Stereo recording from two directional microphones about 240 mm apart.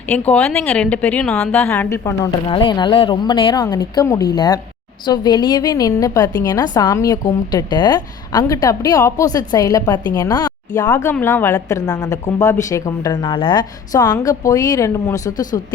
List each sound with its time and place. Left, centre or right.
0.1 s a woman's voice: centre